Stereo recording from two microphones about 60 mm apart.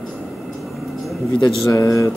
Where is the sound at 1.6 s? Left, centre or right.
Left.